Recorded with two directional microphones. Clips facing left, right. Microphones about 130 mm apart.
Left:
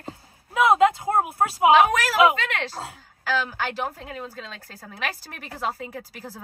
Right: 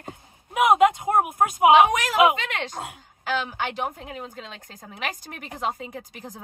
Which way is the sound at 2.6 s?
20° right (ahead or behind).